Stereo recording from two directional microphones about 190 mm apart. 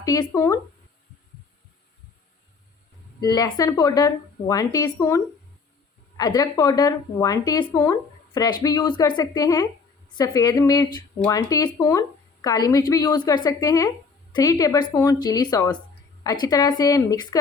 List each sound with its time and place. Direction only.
0.0 s speech: 20° left (ahead or behind)
3.2 s speech: 20° left (ahead or behind)